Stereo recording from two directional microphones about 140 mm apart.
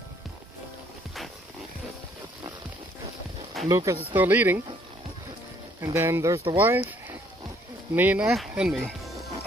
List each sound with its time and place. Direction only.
3.6 s speech: 20° right (ahead or behind)
5.9 s speech: 20° right (ahead or behind); by 9.3 s centre (ahead or behind)